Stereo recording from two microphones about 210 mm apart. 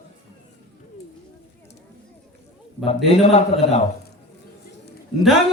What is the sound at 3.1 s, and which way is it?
Speech, 30° left (ahead or behind).